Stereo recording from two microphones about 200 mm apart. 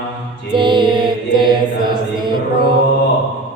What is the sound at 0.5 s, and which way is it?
Mantra, 25° right (ahead or behind).